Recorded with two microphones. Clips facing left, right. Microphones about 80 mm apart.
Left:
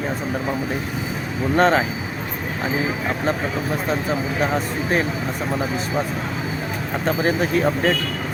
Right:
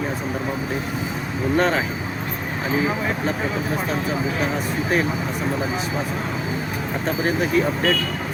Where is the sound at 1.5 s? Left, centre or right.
Left.